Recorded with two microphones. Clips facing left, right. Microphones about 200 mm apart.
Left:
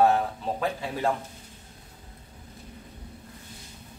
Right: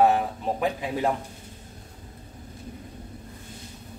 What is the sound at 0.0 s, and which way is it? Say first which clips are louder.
Speech: right 1 dB; 15° right (ahead or behind).